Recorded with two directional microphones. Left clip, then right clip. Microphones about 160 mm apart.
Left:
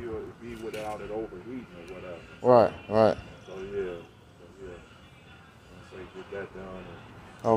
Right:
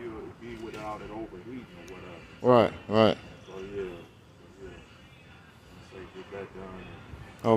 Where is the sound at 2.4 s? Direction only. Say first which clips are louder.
Left 2 dB; 45° right (ahead or behind).